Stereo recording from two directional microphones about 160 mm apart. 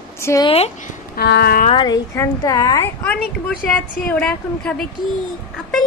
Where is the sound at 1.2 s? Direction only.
80° left.